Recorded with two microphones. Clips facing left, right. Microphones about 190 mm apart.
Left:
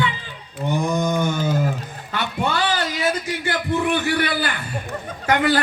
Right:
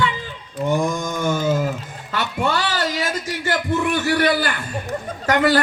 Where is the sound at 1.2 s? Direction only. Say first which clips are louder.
Right 2 dB; 45° right (ahead or behind).